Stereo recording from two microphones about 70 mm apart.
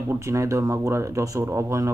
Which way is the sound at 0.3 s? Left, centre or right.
Right.